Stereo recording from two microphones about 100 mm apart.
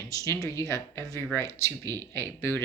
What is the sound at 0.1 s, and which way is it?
Speech, 35° left (ahead or behind).